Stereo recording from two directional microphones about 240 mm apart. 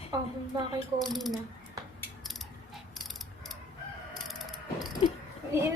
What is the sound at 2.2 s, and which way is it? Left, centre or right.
Mechanisms, centre.